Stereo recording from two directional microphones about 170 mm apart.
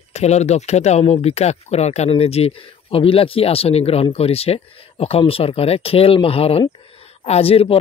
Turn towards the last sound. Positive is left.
turn(degrees=35)  # may be behind; listen again after turning